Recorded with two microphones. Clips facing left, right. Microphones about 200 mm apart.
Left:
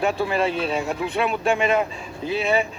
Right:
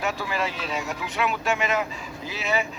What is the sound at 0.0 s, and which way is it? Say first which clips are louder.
Speech: left 6 dB; 30° left (ahead or behind).